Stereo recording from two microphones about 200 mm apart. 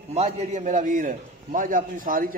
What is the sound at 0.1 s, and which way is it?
A man's voice, 35° right (ahead or behind).